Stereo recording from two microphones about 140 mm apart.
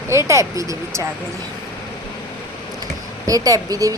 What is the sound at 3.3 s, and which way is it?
Speech, 25° right (ahead or behind).